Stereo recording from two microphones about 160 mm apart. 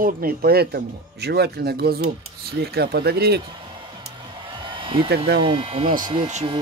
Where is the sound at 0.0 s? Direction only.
70° right (ahead or behind).